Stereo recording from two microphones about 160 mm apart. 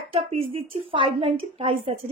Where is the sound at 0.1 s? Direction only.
35° right (ahead or behind).